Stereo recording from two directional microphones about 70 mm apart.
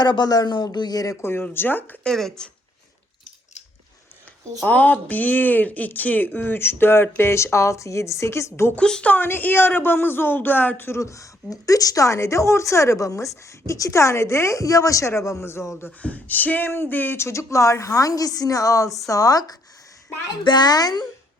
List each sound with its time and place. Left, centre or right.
0.0 s speech: left
1.2 s a man's voice: left
2.0 s a woman's voice: centre
4.6 s speech: left
8.7 s a woman's voice: centre
9.1 s a man's voice: left
11.0 s a woman's voice: left
15.9 s speech: left
20.4 s speech: left